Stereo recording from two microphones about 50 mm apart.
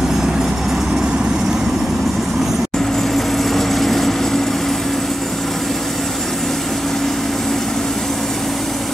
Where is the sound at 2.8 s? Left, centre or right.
Centre.